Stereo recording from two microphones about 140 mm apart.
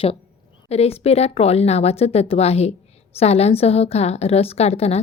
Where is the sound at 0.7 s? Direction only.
45° left (ahead or behind).